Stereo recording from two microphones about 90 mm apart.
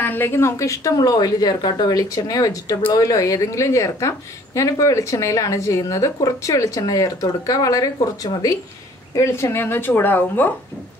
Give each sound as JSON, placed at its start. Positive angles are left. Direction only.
{"t": 0.0, "sound": "a woman's voice", "side_deg": 20}
{"t": 9.1, "sound": "speech", "side_deg": 30}